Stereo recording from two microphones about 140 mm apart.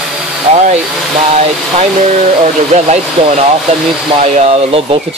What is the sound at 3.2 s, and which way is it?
Speech, 45° right (ahead or behind).